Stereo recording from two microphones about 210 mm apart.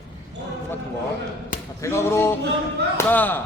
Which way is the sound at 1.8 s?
10° left (ahead or behind).